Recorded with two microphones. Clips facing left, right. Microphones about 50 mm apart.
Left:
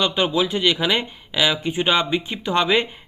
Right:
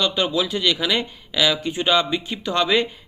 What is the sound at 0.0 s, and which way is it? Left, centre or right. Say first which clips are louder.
Speech: left 1 dB; left.